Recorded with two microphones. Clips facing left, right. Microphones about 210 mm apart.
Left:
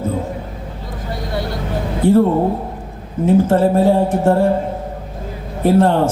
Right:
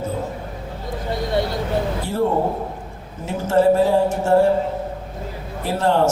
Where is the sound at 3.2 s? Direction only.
55° left (ahead or behind).